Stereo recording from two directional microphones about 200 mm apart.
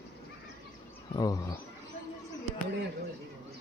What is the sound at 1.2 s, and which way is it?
Speech, 20° left (ahead or behind).